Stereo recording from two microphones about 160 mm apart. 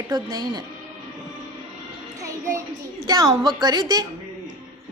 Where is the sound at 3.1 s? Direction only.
30° right (ahead or behind).